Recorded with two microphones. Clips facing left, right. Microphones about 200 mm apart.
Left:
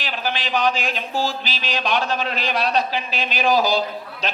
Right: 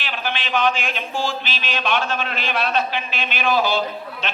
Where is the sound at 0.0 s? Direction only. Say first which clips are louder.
Left 1 dB; 35° left (ahead or behind).